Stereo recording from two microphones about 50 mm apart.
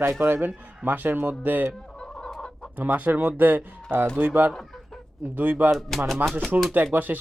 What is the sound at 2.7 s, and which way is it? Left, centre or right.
Speech, right.